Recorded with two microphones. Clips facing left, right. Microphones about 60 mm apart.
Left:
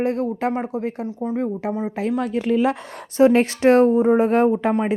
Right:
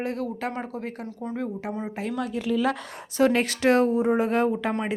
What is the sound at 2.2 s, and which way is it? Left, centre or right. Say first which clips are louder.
Speech: left 4 dB; left.